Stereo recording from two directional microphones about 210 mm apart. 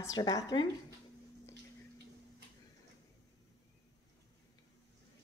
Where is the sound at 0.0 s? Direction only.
15° left (ahead or behind).